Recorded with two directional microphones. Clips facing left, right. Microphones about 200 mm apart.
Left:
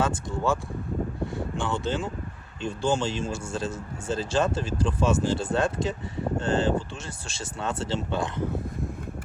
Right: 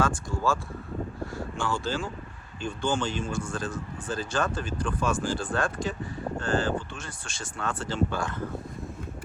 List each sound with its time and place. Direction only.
0.3 s speech: 20° left (ahead or behind)
1.2 s speech: centre (ahead or behind)
1.5 s speech: 20° left (ahead or behind)